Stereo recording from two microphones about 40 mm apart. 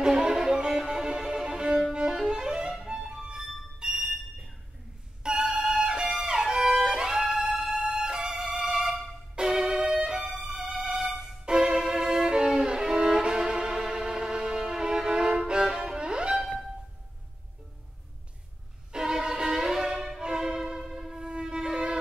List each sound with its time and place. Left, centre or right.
0.0 s music: centre
5.2 s music: centre
5.9 s music: right
6.2 s violin: centre
8.4 s music: centre
9.3 s music: centre
10.4 s music: centre
11.4 s violin: centre
18.9 s violin: centre